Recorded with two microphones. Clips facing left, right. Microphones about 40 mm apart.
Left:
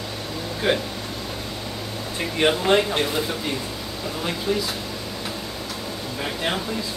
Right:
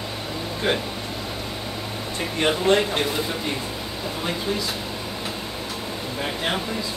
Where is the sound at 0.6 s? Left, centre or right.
Centre.